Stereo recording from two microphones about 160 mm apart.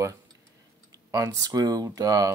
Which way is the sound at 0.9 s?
20° right (ahead or behind).